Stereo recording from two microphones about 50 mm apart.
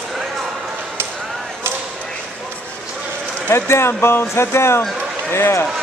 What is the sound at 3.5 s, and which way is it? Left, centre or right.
Speech, left.